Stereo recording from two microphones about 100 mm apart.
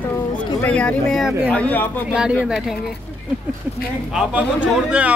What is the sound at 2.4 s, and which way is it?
Speech, 5° right (ahead or behind).